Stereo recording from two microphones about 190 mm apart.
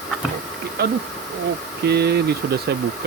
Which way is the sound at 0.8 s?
55° right (ahead or behind).